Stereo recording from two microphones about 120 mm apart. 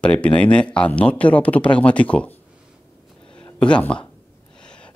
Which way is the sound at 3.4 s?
10° left (ahead or behind).